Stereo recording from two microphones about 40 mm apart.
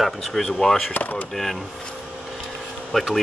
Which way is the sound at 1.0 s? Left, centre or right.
Left.